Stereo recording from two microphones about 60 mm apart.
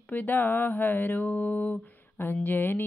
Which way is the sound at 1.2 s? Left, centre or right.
Centre.